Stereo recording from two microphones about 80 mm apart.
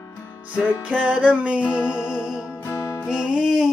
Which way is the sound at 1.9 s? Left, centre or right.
Centre.